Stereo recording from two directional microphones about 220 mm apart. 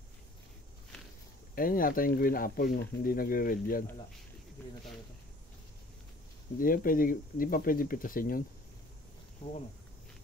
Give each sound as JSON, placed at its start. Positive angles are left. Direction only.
{"t": 1.5, "sound": "speech", "side_deg": 40}
{"t": 4.6, "sound": "speech", "side_deg": 10}
{"t": 6.6, "sound": "speech", "side_deg": 40}